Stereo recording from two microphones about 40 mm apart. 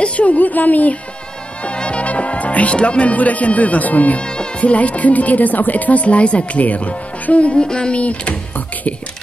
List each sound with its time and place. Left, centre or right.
0.0 s speech: left
1.6 s speech: left
4.2 s music: left
4.6 s speech: left
7.6 s speech: left
8.0 s speech: left